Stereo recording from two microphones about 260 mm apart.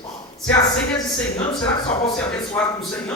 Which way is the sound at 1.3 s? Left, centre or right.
Left.